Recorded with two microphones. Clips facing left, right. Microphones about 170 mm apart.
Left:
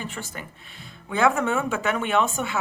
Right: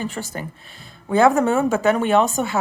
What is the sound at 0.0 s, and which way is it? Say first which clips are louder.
Speech: right 7 dB; 35° right (ahead or behind).